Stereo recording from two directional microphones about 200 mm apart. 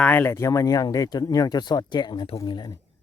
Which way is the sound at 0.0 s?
10° left (ahead or behind).